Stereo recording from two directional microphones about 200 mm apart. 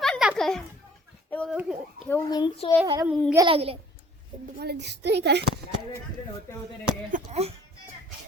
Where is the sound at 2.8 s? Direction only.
20° right (ahead or behind).